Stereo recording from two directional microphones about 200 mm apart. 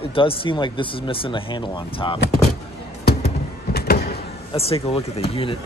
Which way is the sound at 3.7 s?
50° left (ahead or behind).